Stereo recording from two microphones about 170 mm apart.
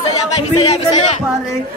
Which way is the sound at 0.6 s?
35° left (ahead or behind).